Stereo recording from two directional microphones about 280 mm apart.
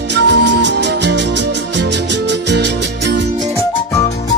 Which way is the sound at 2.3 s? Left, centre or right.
Right.